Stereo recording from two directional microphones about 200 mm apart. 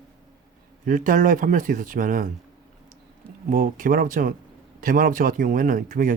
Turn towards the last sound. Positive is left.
turn(degrees=-45)  # may be behind; listen again after turning